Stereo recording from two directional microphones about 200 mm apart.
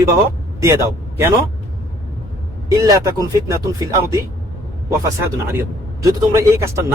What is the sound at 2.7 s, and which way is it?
Speech, 15° right (ahead or behind).